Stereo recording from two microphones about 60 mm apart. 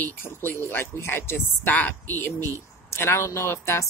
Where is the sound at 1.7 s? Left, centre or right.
Left.